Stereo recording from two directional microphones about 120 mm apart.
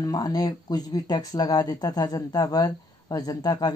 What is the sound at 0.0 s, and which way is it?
Speech, 30° left (ahead or behind).